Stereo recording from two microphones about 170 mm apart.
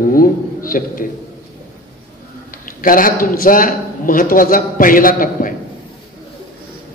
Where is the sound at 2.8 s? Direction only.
55° left (ahead or behind).